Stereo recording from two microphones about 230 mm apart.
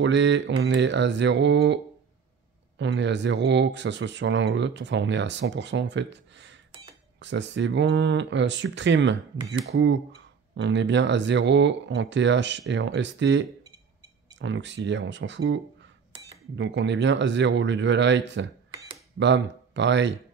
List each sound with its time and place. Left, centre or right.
0.0 s speech: right
2.8 s speech: right
16.1 s cutlery: right
16.5 s speech: right